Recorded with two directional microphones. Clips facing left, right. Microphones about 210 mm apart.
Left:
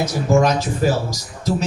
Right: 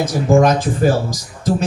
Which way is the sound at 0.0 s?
50° right (ahead or behind).